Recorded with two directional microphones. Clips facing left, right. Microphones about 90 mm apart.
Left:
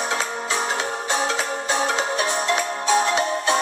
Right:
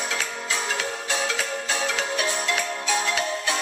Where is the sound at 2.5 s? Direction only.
30° left (ahead or behind).